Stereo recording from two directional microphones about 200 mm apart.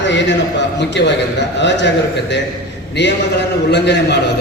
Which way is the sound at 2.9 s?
60° left (ahead or behind).